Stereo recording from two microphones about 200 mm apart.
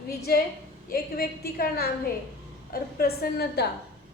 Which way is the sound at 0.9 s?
50° left (ahead or behind).